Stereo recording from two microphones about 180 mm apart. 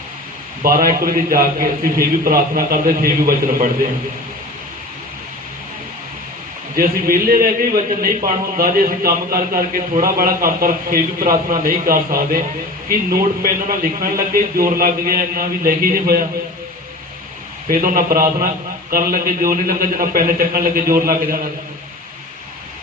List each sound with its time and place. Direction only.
0.6 s a man's voice: 55° right (ahead or behind)
6.7 s a man's voice: 55° right (ahead or behind)
17.7 s a man's voice: 55° right (ahead or behind)